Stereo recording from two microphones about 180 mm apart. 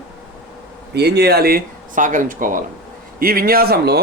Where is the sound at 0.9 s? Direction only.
65° right (ahead or behind).